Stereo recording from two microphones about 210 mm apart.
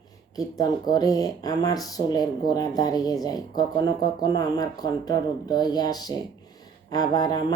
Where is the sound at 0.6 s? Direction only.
20° left (ahead or behind).